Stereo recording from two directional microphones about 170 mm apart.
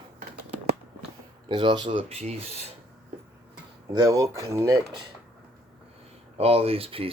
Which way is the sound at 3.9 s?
20° right (ahead or behind).